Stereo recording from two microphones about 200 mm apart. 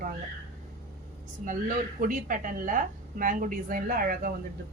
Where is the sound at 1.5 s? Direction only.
40° right (ahead or behind).